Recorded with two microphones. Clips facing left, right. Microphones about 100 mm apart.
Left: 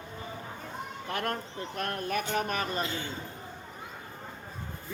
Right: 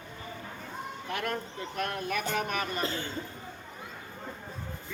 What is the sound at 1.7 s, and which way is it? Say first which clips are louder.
Speech: even; 40° left (ahead or behind).